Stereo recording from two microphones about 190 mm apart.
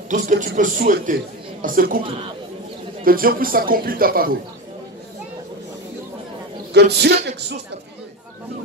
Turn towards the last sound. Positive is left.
turn(degrees=-60)  # may be behind; listen again after turning